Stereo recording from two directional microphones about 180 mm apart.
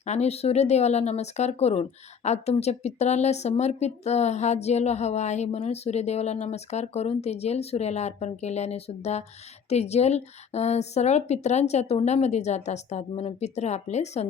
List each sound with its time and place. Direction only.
0.0 s speech: 40° left (ahead or behind)